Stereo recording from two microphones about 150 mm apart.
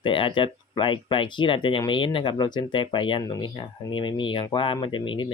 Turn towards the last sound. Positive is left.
turn(degrees=35)  # may be behind; listen again after turning